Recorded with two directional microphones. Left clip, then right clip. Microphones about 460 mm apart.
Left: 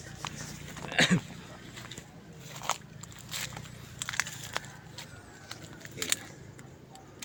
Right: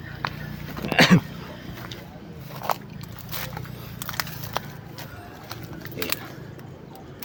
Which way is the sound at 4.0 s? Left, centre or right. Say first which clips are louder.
Right 2 dB; left.